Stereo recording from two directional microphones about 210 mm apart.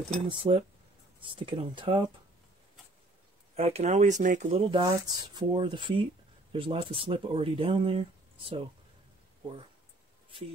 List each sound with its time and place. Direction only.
0.3 s speech: 25° right (ahead or behind)
3.5 s speech: 30° right (ahead or behind)